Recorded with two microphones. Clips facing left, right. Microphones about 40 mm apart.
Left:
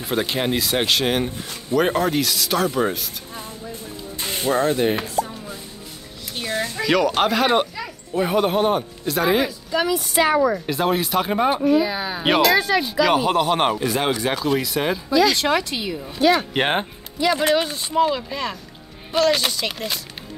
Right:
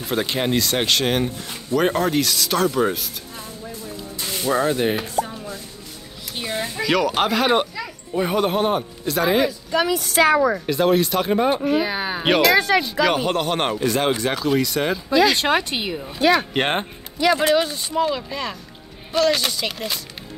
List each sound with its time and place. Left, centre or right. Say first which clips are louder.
0.0 s speech: even; centre
4.2 s a sound: left 1 dB; left
4.5 s speech: left 1 dB; centre
5.2 s music: right 1 dB; right
6.3 s a sound: left 1 dB; centre
6.8 s speech: left 1 dB; centre
9.9 s speech: right 2 dB; right
10.7 s speech: right 2 dB; centre
11.6 s a woman's voice: left 3 dB; right
11.9 s speech: right 1 dB; right
12.3 s speech: right 1 dB; centre
15.0 s a woman's voice: right 1 dB; right
16.5 s speech: left 1 dB; centre